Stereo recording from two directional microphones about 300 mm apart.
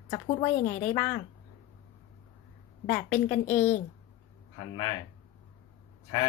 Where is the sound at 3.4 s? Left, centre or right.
Centre.